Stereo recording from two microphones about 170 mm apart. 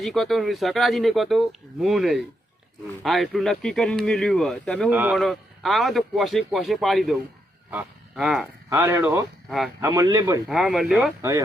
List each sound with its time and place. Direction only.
0.0 s speech: centre (ahead or behind)
4.9 s speech: 10° right (ahead or behind)
5.1 s speech: centre (ahead or behind)
8.7 s speech: 15° right (ahead or behind)
10.5 s speech: centre (ahead or behind)